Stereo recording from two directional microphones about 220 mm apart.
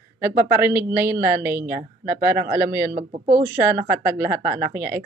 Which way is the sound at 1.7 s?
35° right (ahead or behind).